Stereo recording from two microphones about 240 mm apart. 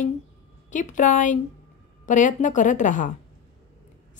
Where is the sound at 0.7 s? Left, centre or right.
Left.